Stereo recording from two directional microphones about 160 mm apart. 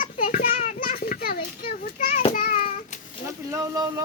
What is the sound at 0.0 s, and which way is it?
Children playing, 60° left (ahead or behind).